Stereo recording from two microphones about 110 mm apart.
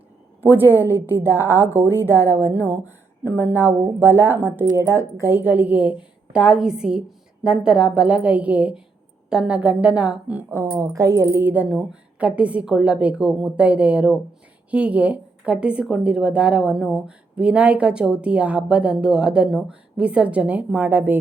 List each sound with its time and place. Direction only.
0.5 s a woman's voice: 20° right (ahead or behind)
10.8 s a woman's voice: 30° right (ahead or behind)